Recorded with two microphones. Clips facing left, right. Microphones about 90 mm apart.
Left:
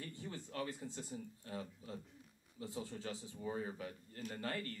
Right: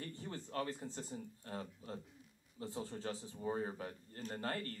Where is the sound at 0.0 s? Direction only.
40° right (ahead or behind).